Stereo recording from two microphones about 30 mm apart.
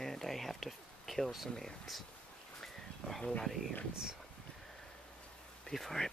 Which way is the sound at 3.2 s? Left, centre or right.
Left.